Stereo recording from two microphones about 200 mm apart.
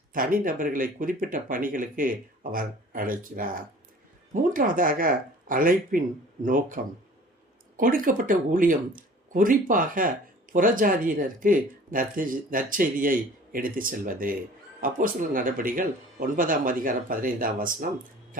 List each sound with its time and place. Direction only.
0.1 s speech: 45° right (ahead or behind)